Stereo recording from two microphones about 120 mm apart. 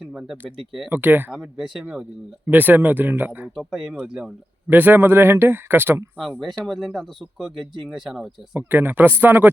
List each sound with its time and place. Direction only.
0.0 s a sound: 5° right (ahead or behind)
0.6 s speech: centre (ahead or behind)
0.9 s speech: 15° right (ahead or behind)
1.3 s speech: centre (ahead or behind)
3.5 s speech: centre (ahead or behind); by 6.1 s 20° right (ahead or behind)
6.7 s speech: centre (ahead or behind)
8.5 s speech: 15° right (ahead or behind)